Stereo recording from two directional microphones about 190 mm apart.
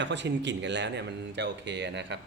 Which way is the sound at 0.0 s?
70° right (ahead or behind).